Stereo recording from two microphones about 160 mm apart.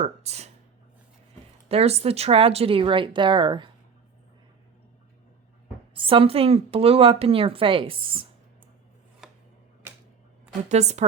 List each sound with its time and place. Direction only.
0.0 s speech: 40° right (ahead or behind)
1.6 s speech: 40° right (ahead or behind)
5.9 s speech: 35° right (ahead or behind)
10.7 s a woman's voice: 45° right (ahead or behind)